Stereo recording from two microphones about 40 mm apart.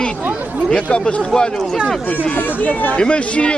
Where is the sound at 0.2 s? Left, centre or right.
Right.